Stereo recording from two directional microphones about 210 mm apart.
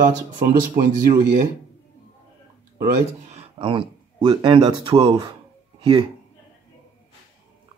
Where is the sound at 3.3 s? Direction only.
25° right (ahead or behind).